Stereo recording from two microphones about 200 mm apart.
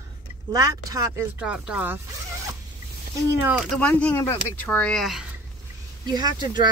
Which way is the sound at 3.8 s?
5° left (ahead or behind).